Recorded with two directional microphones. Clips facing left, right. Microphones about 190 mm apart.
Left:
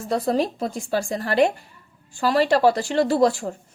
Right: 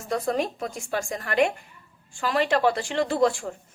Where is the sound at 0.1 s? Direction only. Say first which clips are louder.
Left 4 dB; 35° left (ahead or behind).